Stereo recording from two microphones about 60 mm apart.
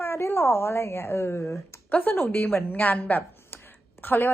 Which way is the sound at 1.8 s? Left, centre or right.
Left.